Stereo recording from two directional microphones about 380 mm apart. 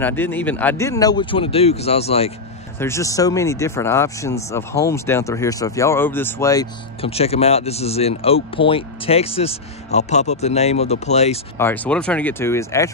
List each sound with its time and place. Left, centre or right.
0.0 s speech: centre
11.5 s speech: centre